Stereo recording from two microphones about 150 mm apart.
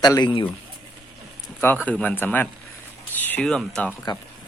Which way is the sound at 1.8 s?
10° left (ahead or behind).